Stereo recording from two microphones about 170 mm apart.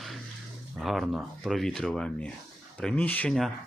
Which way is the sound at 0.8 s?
Centre (ahead or behind).